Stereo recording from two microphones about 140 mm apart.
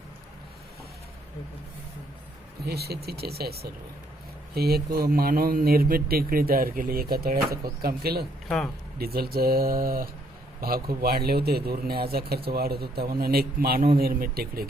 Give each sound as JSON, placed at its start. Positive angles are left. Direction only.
{"t": 3.1, "sound": "speech", "side_deg": -90}
{"t": 8.4, "sound": "speech", "side_deg": 5}
{"t": 9.0, "sound": "speech", "side_deg": -90}